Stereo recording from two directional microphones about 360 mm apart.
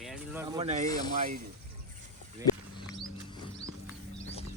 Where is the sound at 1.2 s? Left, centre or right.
Right.